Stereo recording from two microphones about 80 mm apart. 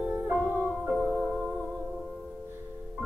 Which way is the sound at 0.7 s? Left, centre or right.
Centre.